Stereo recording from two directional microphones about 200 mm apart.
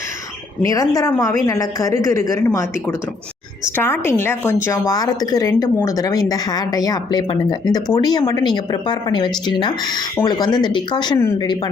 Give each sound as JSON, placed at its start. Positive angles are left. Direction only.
{"t": 0.6, "sound": "a woman's voice", "side_deg": 15}